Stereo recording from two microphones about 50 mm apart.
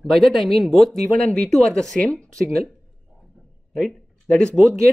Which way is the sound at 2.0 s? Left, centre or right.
Left.